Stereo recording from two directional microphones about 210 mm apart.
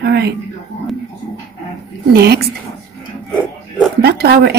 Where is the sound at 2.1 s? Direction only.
50° right (ahead or behind).